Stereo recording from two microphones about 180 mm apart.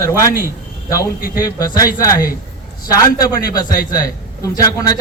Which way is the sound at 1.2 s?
55° left (ahead or behind).